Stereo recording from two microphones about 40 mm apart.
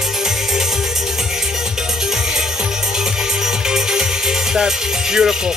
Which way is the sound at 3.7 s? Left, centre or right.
Centre.